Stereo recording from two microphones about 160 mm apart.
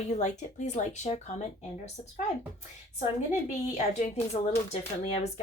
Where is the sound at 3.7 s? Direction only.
45° left (ahead or behind).